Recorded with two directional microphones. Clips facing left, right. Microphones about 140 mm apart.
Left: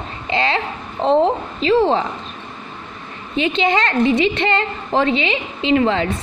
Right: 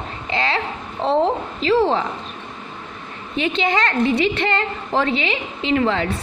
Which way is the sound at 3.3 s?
20° left (ahead or behind).